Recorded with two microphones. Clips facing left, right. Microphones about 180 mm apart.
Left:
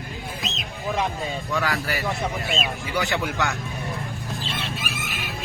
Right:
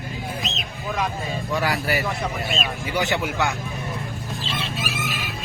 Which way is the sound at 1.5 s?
15° right (ahead or behind).